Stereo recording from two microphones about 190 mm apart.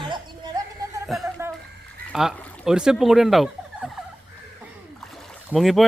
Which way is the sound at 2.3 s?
5° left (ahead or behind).